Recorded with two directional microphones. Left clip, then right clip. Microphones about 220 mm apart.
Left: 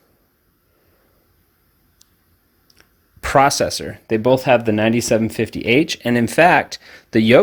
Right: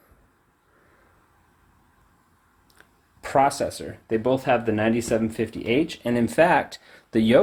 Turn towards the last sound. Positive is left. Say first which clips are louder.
# left 6 dB
turn(degrees=35)  # may be behind; listen again after turning